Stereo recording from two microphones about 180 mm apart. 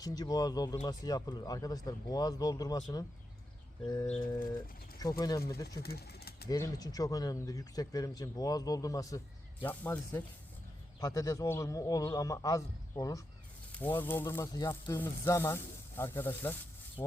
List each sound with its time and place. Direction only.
0.0 s speech: 20° left (ahead or behind)
3.8 s speech: 20° left (ahead or behind)
5.8 s speech: 60° left (ahead or behind)
6.5 s speech: 20° left (ahead or behind)